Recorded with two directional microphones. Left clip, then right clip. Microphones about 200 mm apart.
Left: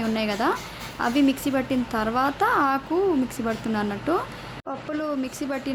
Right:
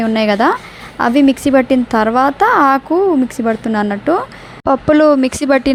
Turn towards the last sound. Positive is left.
turn(degrees=-45)  # may be behind; listen again after turning